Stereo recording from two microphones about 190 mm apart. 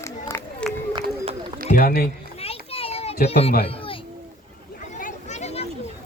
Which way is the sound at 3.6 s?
30° left (ahead or behind).